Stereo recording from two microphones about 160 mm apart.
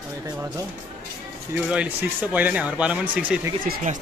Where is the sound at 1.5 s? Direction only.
5° right (ahead or behind).